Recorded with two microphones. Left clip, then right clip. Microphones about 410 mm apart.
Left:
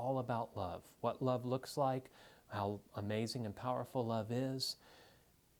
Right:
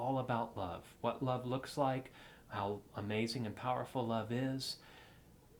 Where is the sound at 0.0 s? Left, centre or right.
Left.